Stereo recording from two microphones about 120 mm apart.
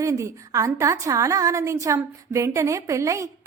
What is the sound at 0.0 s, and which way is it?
A woman's voice, 25° right (ahead or behind).